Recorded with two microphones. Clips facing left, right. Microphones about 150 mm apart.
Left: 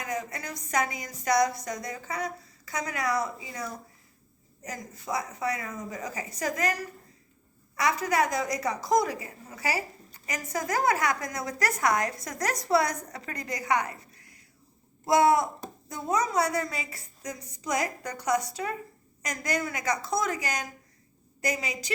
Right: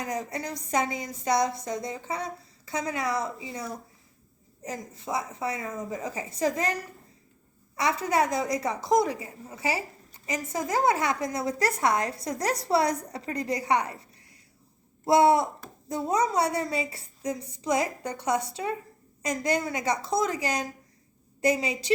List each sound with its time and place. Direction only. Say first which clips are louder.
0.0 s a woman's voice: right 2 dB; 35° right (ahead or behind)
7.8 s a woman's voice: right 1 dB; 30° right (ahead or behind)
15.0 s a sound: right 2 dB; 30° right (ahead or behind)
15.9 s a woman's voice: right 3 dB; 30° right (ahead or behind)